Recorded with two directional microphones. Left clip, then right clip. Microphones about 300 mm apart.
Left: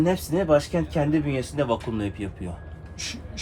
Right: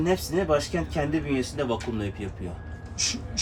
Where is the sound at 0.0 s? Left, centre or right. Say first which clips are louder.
Left 2 dB; centre.